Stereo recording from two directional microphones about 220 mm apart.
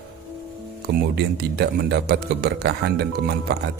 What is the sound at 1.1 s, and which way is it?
A man's voice, 45° right (ahead or behind).